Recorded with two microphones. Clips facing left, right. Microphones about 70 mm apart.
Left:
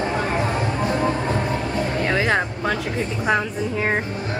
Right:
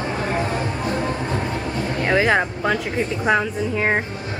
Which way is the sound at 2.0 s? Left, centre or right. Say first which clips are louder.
Right 4 dB; centre.